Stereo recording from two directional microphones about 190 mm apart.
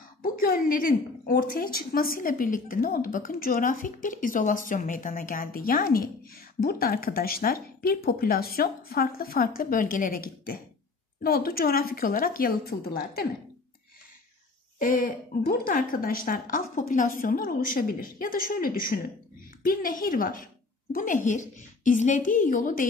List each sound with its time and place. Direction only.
0.2 s a woman's voice: 50° left (ahead or behind)
14.8 s a woman's voice: 45° left (ahead or behind)